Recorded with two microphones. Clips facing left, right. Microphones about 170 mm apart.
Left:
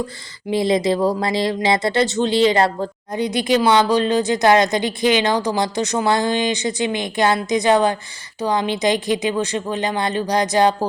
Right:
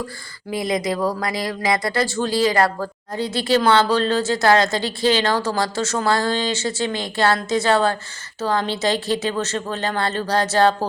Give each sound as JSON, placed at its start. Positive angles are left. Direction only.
{"t": 0.5, "sound": "speech", "side_deg": 25}